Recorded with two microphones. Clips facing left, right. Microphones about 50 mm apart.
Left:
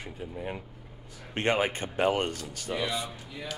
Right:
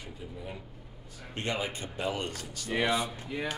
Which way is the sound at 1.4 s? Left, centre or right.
Left.